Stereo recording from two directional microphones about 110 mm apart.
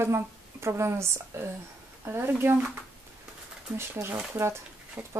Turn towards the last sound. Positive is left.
turn(degrees=-15)  # may be behind; listen again after turning